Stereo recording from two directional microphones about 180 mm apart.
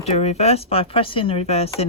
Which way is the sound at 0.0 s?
35° left (ahead or behind).